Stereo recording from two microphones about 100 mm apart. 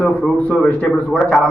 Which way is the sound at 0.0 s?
10° left (ahead or behind).